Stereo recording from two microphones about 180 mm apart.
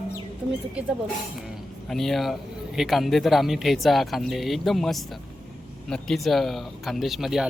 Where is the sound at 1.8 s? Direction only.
Centre (ahead or behind).